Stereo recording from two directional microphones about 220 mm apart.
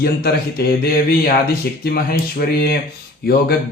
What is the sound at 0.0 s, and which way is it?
Speech, 45° left (ahead or behind).